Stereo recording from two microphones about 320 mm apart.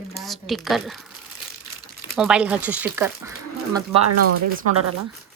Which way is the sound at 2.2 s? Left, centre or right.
Centre.